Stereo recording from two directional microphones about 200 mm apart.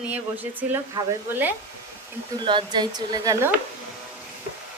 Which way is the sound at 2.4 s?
25° right (ahead or behind).